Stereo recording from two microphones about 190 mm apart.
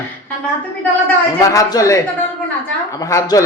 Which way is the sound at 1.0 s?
15° left (ahead or behind).